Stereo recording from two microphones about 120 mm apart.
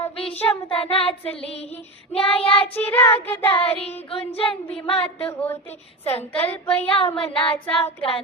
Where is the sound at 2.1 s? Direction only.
55° left (ahead or behind).